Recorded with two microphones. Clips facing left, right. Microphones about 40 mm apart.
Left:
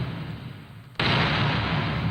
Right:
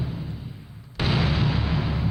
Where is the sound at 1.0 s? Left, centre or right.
Left.